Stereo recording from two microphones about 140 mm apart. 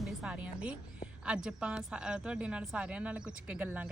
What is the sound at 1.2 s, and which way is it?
Speech, 5° right (ahead or behind).